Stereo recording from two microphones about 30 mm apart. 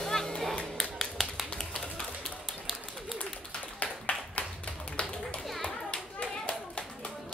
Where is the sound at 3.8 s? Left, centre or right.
Left.